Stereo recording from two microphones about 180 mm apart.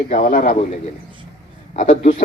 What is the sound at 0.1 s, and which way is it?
Speech, 50° left (ahead or behind).